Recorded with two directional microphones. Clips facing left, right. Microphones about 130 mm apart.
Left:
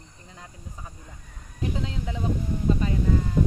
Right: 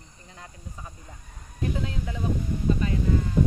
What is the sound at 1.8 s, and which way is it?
Speech, 25° left (ahead or behind).